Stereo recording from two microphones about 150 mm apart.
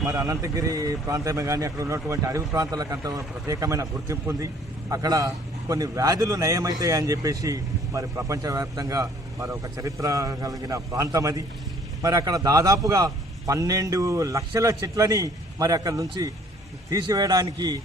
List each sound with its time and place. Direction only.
0.0 s a man's voice: 20° right (ahead or behind)